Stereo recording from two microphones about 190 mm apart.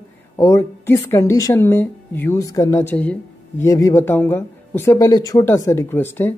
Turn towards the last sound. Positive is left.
turn(degrees=10)  # may be behind; listen again after turning